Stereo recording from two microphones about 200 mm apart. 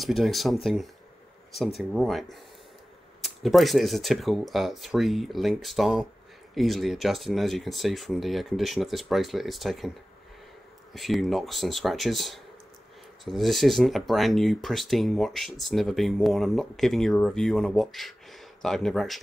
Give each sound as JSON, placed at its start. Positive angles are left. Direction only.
{"t": 0.0, "sound": "speech", "side_deg": 0}
{"t": 1.8, "sound": "speech", "side_deg": 0}
{"t": 10.9, "sound": "speech", "side_deg": 0}